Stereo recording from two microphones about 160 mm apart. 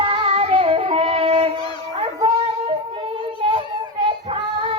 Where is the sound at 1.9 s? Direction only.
35° right (ahead or behind).